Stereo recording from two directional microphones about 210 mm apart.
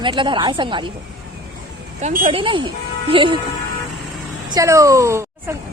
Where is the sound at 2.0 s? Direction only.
35° right (ahead or behind).